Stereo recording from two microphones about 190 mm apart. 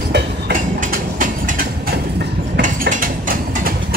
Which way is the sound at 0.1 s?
65° right (ahead or behind).